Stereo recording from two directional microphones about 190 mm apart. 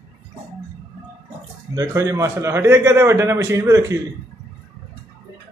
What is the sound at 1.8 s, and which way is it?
A man's voice, 15° right (ahead or behind).